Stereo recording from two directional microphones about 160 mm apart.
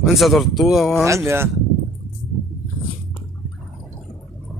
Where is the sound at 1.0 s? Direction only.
15° right (ahead or behind).